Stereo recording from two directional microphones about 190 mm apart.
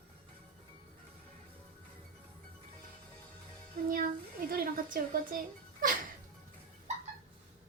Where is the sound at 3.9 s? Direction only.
50° right (ahead or behind).